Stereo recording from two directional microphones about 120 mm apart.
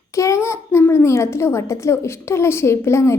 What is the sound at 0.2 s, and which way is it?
A woman's voice, 25° left (ahead or behind).